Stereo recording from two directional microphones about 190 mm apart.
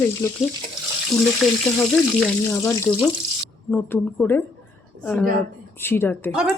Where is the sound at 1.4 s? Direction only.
Centre (ahead or behind).